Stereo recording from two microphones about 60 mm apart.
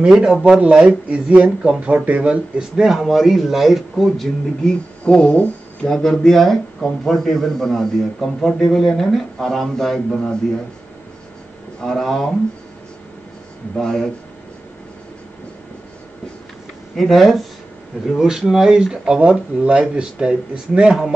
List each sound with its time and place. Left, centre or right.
0.0 s speech: centre
5.0 s speech: centre
5.9 s speech: centre
11.8 s speech: centre
13.7 s speech: centre
16.9 s speech: centre
18.5 s speech: centre